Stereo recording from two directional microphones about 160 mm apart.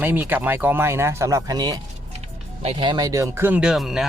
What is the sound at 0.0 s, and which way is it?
Speech, 10° right (ahead or behind).